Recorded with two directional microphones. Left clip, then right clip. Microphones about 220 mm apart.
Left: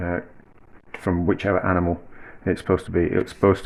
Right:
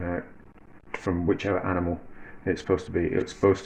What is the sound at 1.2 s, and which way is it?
Speech, 30° left (ahead or behind).